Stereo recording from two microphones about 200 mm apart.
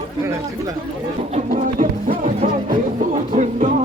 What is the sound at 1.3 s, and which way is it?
Music, 40° right (ahead or behind).